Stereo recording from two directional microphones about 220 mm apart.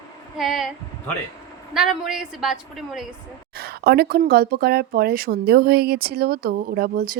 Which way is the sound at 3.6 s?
45° right (ahead or behind).